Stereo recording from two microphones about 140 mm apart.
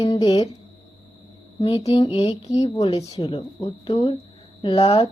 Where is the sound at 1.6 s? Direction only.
40° left (ahead or behind).